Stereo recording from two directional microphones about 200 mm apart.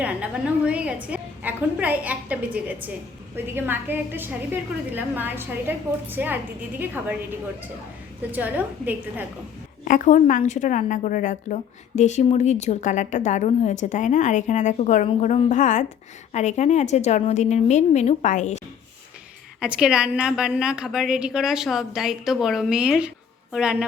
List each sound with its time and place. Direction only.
0.0 s a woman's voice: 5° right (ahead or behind)
8.3 s a woman's voice: 10° right (ahead or behind)
9.8 s a woman's voice: 40° left (ahead or behind)
19.5 s a woman's voice: 5° right (ahead or behind)